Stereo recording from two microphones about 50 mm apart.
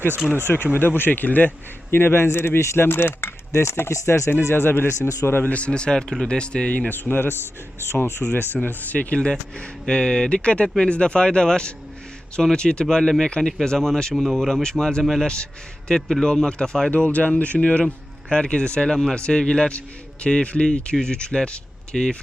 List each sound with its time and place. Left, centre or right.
0.4 s a man's voice: left
4.5 s a man's voice: left
4.9 s speech: left
5.3 s speech: left
7.0 s a man's voice: left
7.8 s speech: left
8.6 s speech: left
9.6 s speech: centre
16.0 s a man's voice: centre
16.2 s speech: centre
16.9 s speech: left